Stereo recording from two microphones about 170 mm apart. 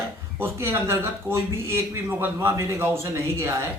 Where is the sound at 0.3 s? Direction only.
15° right (ahead or behind).